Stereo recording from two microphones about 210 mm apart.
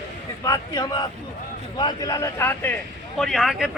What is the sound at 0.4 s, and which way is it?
A man's voice, 15° left (ahead or behind).